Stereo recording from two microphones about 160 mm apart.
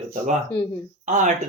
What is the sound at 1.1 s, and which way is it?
Speech, 50° right (ahead or behind).